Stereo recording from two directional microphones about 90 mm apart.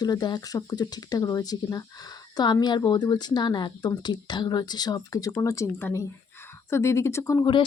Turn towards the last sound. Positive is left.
turn(degrees=35)  # may be behind; listen again after turning